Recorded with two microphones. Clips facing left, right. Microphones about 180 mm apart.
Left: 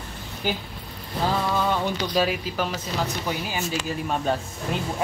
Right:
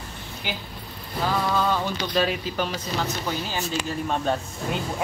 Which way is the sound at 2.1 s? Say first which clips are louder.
Right 2 dB; 5° left (ahead or behind).